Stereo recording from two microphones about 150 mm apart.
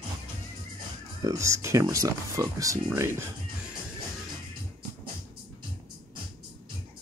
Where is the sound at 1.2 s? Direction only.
20° right (ahead or behind).